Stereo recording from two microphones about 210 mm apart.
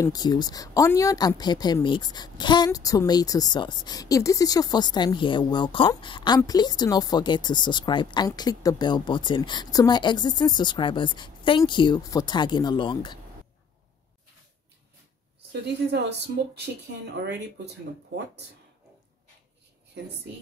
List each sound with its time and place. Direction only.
0.0 s speech: 20° left (ahead or behind)
15.5 s a woman's voice: 55° right (ahead or behind)